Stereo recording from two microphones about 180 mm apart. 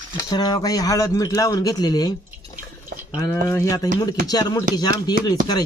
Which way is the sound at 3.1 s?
15° left (ahead or behind).